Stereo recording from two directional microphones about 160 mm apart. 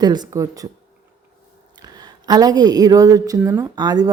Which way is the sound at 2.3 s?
25° right (ahead or behind).